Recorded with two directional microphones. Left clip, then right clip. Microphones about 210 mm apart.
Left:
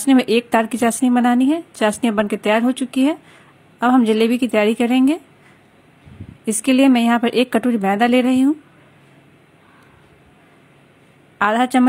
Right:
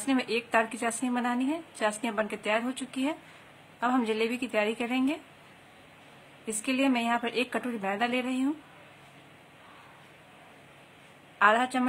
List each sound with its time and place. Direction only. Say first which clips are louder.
0.0 s a woman's voice: left 14 dB; 35° left (ahead or behind)
6.4 s a woman's voice: left 13 dB; 35° left (ahead or behind)
11.3 s a woman's voice: left 7 dB; 35° left (ahead or behind)